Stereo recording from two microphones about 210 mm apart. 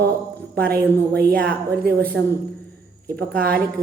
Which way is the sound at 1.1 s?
50° right (ahead or behind).